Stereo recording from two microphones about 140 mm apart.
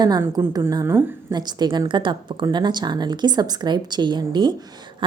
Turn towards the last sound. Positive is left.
turn(degrees=-30)  # may be behind; listen again after turning